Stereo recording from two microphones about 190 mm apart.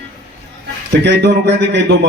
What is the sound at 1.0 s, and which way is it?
Speech, 65° right (ahead or behind).